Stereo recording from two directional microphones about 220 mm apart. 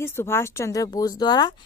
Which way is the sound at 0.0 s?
10° left (ahead or behind).